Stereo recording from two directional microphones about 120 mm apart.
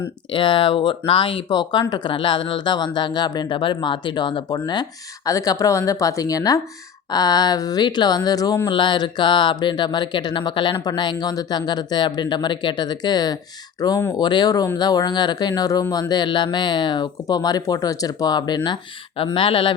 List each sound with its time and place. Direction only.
0.3 s speech: 45° left (ahead or behind)